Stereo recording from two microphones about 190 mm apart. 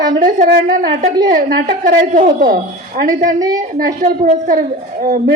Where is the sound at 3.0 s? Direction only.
45° right (ahead or behind).